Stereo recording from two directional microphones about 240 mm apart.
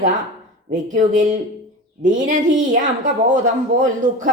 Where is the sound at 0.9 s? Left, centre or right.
Right.